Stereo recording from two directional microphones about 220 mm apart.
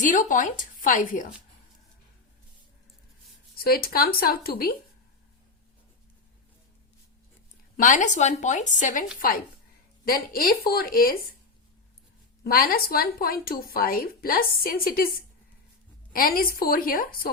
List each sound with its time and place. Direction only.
0.0 s a woman's voice: 35° left (ahead or behind)
3.5 s speech: 45° left (ahead or behind)
7.8 s a woman's voice: 35° left (ahead or behind)
12.4 s a woman's voice: 40° left (ahead or behind)